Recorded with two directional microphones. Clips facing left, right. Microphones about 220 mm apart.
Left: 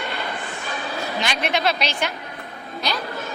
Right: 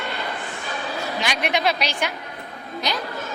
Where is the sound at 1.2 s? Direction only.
15° right (ahead or behind).